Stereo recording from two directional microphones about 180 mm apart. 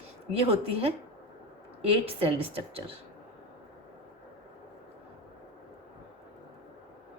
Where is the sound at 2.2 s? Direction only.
35° right (ahead or behind).